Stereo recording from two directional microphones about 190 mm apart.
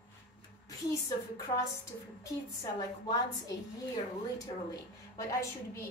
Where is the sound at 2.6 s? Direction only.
20° left (ahead or behind).